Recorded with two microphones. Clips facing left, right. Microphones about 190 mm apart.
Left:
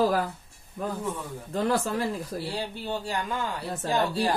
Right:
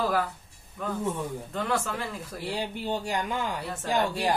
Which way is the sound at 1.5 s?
35° left (ahead or behind).